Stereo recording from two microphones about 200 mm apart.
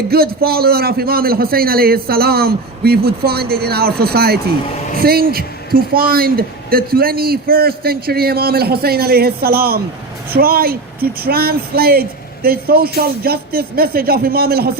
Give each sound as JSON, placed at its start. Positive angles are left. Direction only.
{"t": 0.1, "sound": "speech", "side_deg": -50}